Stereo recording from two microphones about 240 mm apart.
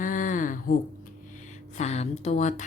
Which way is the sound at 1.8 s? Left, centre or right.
Left.